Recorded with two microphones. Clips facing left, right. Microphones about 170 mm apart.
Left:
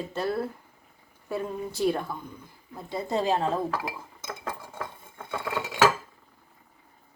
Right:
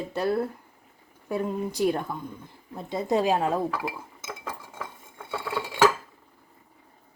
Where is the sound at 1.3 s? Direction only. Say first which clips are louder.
Right 3 dB; 15° right (ahead or behind).